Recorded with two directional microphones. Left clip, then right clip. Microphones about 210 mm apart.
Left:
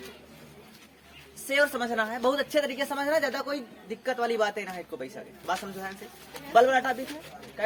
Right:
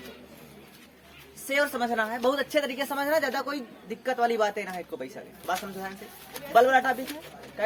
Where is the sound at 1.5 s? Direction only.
Centre (ahead or behind).